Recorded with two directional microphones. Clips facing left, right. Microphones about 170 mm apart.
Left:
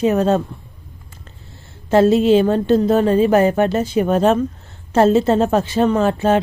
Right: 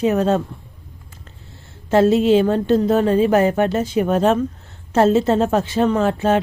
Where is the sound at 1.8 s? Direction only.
35° left (ahead or behind).